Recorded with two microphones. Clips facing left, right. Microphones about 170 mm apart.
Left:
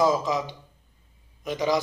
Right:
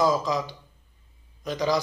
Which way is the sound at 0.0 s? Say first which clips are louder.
Left 1 dB; 20° left (ahead or behind).